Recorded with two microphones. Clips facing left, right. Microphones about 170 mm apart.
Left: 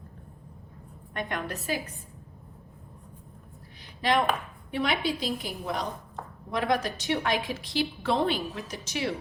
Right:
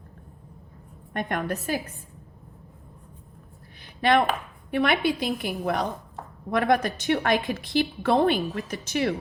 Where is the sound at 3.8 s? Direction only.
60° right (ahead or behind).